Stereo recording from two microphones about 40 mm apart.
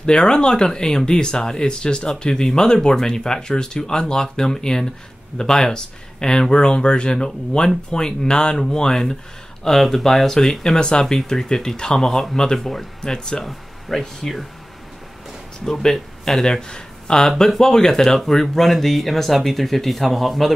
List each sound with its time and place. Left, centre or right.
0.0 s speech: left
9.7 s speech: centre
13.0 s speech: centre
13.4 s speech: centre
15.6 s speech: centre